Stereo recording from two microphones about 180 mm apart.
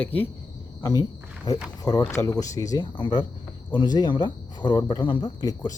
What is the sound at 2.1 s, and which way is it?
Speech, 15° left (ahead or behind).